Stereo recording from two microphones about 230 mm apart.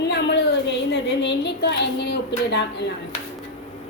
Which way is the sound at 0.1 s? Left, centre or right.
Left.